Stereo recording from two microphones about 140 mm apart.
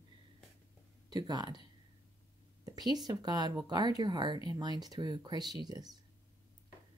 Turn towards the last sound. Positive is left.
turn(degrees=-30)  # may be behind; listen again after turning